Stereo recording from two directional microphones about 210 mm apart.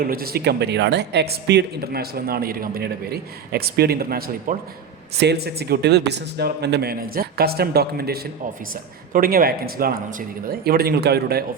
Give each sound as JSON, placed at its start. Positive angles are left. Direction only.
{"t": 0.0, "sound": "speech", "side_deg": -45}